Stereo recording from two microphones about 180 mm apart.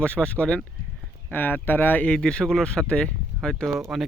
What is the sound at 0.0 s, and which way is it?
Speech, 5° left (ahead or behind).